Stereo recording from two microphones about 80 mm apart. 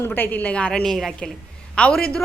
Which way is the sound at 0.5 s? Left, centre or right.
Centre.